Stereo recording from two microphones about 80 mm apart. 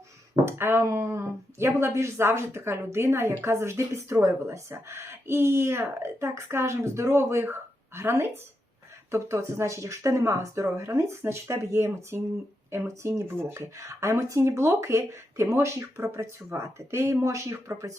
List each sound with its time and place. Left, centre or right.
0.4 s speech: right